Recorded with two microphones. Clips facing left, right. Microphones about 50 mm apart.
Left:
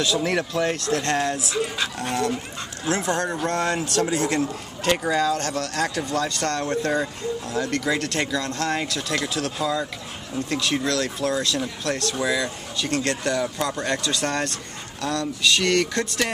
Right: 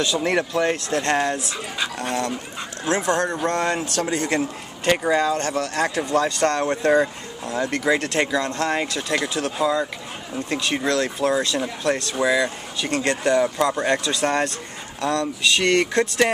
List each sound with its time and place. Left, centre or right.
0.0 s speech: centre
2.8 s speech: centre
3.1 s a man's voice: centre